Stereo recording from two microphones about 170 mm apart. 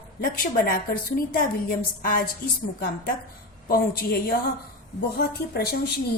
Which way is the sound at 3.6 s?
60° left (ahead or behind).